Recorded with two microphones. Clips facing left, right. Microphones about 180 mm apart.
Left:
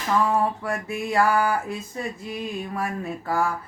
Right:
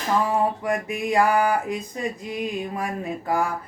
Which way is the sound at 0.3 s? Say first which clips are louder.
Right 2 dB; 15° right (ahead or behind).